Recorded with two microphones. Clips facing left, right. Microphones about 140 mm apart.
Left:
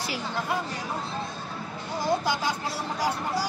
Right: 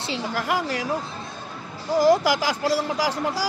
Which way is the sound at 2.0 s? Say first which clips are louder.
Right 8 dB; 90° right.